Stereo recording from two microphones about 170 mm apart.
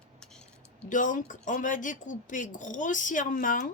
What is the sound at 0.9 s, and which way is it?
Speech, 50° left (ahead or behind).